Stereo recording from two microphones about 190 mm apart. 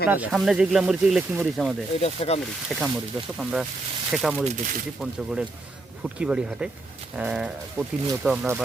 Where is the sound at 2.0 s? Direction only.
35° left (ahead or behind).